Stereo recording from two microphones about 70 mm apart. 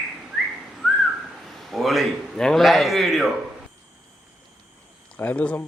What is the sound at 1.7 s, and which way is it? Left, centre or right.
A man's voice, centre.